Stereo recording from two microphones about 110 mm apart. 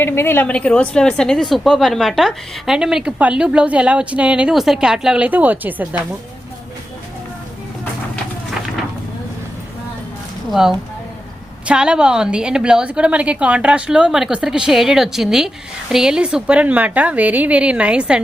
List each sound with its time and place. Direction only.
0.0 s a woman's voice: 20° left (ahead or behind); by 5.9 s 15° right (ahead or behind)
10.5 s a woman's voice: 5° right (ahead or behind)